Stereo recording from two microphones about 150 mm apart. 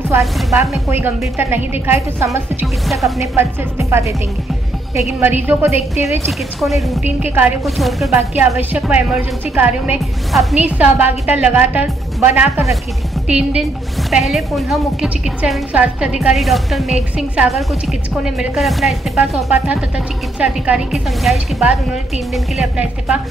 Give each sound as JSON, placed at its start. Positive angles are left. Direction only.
{"t": 0.6, "sound": "a woman's voice", "side_deg": -15}
{"t": 2.6, "sound": "a woman's voice", "side_deg": 0}
{"t": 3.3, "sound": "a woman's voice", "side_deg": -15}
{"t": 5.2, "sound": "a woman's voice", "side_deg": -15}
{"t": 5.7, "sound": "a woman's voice", "side_deg": 45}
{"t": 6.6, "sound": "a woman's voice", "side_deg": 0}
{"t": 7.2, "sound": "a woman's voice", "side_deg": -10}
{"t": 7.6, "sound": "a woman's voice", "side_deg": 0}